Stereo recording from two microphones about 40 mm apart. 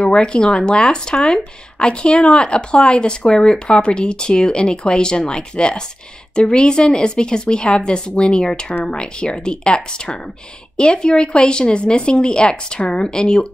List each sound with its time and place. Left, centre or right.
0.1 s speech: centre
10.8 s speech: left